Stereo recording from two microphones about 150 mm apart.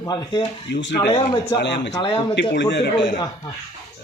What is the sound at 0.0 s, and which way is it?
Speech, 25° left (ahead or behind).